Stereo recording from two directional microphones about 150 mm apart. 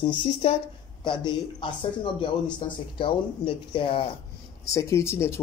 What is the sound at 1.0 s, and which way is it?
Speech, 30° left (ahead or behind).